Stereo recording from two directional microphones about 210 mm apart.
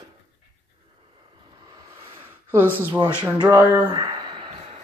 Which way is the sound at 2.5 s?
10° right (ahead or behind).